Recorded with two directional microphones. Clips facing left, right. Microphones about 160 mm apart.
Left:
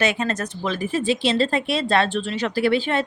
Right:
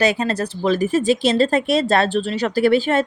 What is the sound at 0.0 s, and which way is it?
Speech, 35° right (ahead or behind).